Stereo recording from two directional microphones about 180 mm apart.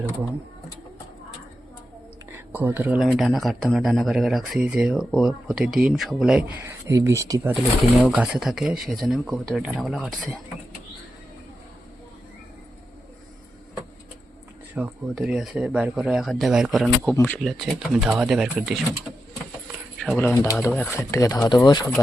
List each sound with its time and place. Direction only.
2.5 s speech: 10° right (ahead or behind)
14.8 s speech: 5° right (ahead or behind)
17.1 s speech: 10° left (ahead or behind)
20.0 s speech: 5° left (ahead or behind); by 21.8 s 25° left (ahead or behind)